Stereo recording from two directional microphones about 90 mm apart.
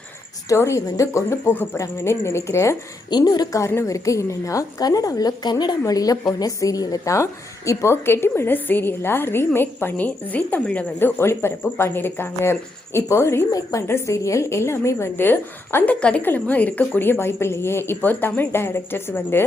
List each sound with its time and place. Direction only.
0.4 s speech: 30° left (ahead or behind)
3.1 s a woman's voice: 50° left (ahead or behind)
3.6 s speech: 30° left (ahead or behind); by 5.7 s 50° left (ahead or behind)
5.8 s a woman's voice: 40° left (ahead or behind); by 11.1 s 15° left (ahead or behind)
11.2 s a woman's voice: 25° left (ahead or behind)
16.0 s a woman's voice: 10° left (ahead or behind)